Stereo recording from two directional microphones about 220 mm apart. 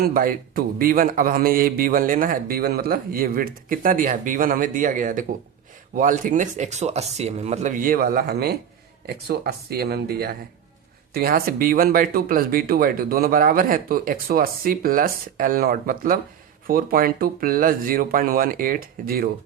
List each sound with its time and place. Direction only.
0.0 s a man's voice: 40° right (ahead or behind)